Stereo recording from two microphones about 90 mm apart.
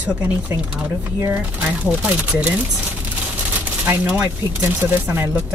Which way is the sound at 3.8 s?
15° right (ahead or behind).